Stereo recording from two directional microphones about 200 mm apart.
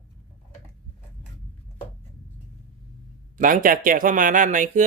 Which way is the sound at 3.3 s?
45° right (ahead or behind).